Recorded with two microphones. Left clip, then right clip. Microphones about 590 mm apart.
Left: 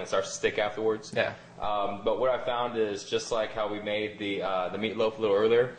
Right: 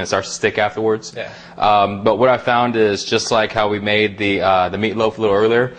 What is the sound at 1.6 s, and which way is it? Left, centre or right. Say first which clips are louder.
A man's voice: right 16 dB; right.